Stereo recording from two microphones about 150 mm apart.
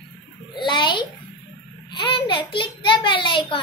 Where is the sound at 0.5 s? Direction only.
30° left (ahead or behind).